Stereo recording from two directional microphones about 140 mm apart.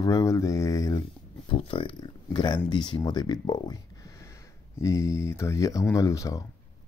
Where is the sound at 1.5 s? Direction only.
40° left (ahead or behind); by 6.4 s 25° left (ahead or behind).